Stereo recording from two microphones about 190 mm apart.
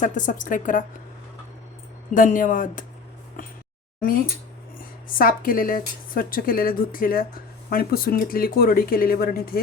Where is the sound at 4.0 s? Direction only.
50° left (ahead or behind).